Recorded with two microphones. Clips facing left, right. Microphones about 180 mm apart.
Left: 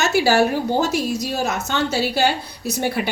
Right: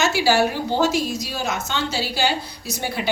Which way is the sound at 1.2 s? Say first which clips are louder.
Left 3 dB; 55° left (ahead or behind).